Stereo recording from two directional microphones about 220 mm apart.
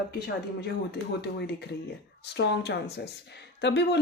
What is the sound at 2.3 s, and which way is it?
Speech, 50° left (ahead or behind).